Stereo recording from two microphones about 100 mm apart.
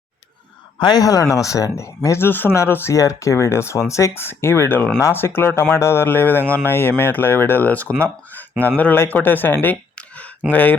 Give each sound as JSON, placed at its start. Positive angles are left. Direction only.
{"t": 0.8, "sound": "speech", "side_deg": 45}